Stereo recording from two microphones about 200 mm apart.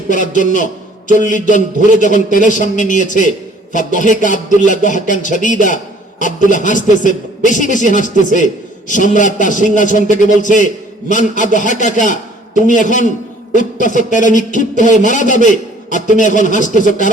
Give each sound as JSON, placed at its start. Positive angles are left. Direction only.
{"t": 0.1, "sound": "a man's voice", "side_deg": 40}
{"t": 14.1, "sound": "a man's voice", "side_deg": 40}